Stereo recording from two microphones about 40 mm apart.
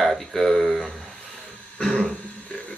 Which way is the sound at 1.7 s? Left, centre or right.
Centre.